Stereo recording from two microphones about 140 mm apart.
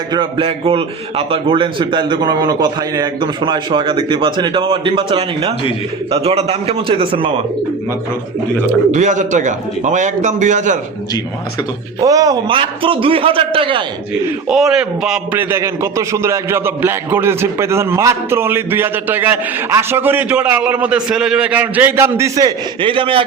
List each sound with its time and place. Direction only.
0.1 s a man's voice: 35° right (ahead or behind)
8.9 s a man's voice: 60° right (ahead or behind)
11.9 s a man's voice: 25° right (ahead or behind)
14.4 s a man's voice: 5° right (ahead or behind); by 23.2 s 40° right (ahead or behind)